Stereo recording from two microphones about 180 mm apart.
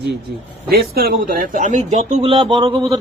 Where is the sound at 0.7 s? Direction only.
60° right (ahead or behind); by 2.7 s 25° right (ahead or behind).